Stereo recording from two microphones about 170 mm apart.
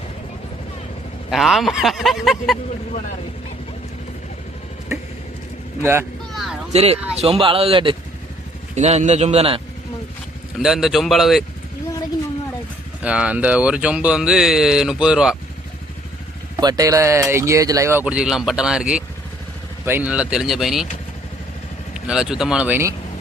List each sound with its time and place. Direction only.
1.3 s speech: centre (ahead or behind)
5.8 s speech: 15° right (ahead or behind)
6.3 s a sound: centre (ahead or behind)
6.7 s a man's voice: 40° right (ahead or behind)
8.7 s a man's voice: 40° right (ahead or behind)
10.6 s speech: centre (ahead or behind)
13.0 s speech: 5° right (ahead or behind)
16.6 s speech: 20° right (ahead or behind); by 20.8 s centre (ahead or behind)
21.9 s speech: 5° right (ahead or behind)